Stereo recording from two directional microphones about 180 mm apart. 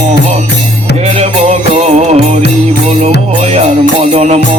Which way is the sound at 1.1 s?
40° right (ahead or behind).